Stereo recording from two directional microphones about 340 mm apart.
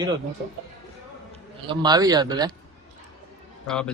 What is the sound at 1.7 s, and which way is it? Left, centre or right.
Speech, centre.